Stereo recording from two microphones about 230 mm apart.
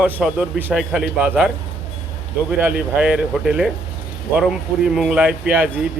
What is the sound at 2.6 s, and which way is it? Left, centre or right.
A man's voice, centre.